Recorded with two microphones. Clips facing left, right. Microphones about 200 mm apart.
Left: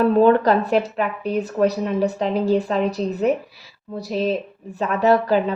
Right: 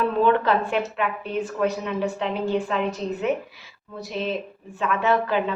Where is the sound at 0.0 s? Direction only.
40° left (ahead or behind).